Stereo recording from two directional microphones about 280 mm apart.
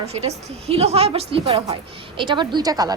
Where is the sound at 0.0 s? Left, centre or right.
Right.